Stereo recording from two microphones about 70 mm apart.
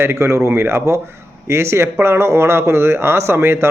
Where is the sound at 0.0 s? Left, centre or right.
Right.